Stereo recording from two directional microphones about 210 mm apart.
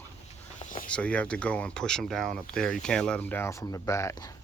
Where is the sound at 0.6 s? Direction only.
40° left (ahead or behind).